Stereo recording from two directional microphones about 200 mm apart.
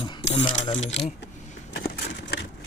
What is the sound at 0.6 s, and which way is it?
Speech, 35° left (ahead or behind).